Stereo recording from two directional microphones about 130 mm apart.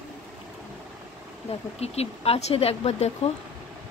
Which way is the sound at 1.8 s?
50° left (ahead or behind).